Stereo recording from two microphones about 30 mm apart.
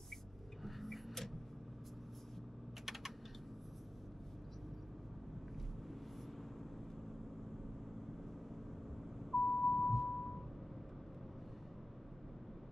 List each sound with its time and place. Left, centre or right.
0.7 s vehicle: centre
2.8 s typing: centre
9.2 s a sound: centre